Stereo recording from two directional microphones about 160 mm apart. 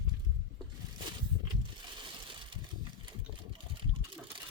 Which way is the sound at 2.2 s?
30° right (ahead or behind).